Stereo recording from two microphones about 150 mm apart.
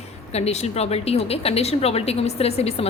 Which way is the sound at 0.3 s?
45° left (ahead or behind).